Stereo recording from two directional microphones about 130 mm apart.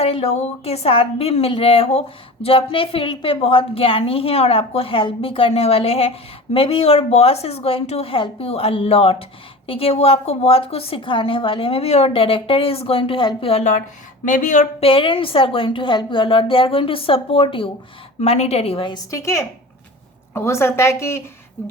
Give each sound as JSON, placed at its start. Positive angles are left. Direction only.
{"t": 0.0, "sound": "a woman's voice", "side_deg": 50}
{"t": 14.3, "sound": "speech", "side_deg": 80}
{"t": 14.8, "sound": "a woman's voice", "side_deg": 45}
{"t": 18.2, "sound": "a woman's voice", "side_deg": 55}
{"t": 19.1, "sound": "a woman's voice", "side_deg": 20}